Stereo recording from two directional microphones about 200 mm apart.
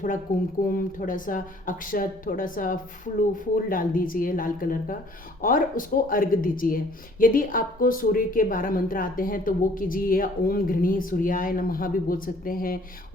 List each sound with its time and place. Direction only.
0.3 s a woman's voice: 45° left (ahead or behind)